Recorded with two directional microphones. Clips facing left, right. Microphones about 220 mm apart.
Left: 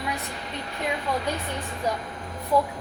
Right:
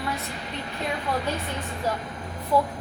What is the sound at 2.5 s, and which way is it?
Speech, 15° left (ahead or behind).